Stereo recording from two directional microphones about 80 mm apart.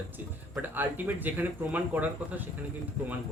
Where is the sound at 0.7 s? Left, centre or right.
Right.